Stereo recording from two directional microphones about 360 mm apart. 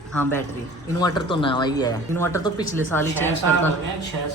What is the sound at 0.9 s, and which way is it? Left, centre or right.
Speech, centre.